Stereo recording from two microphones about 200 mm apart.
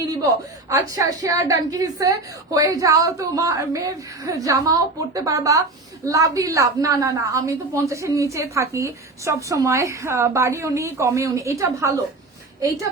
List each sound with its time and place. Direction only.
0.7 s a woman's voice: 15° right (ahead or behind)